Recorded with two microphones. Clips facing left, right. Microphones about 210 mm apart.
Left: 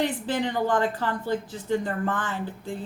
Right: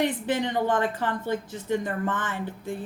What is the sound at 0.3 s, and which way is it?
A woman's voice, 20° right (ahead or behind).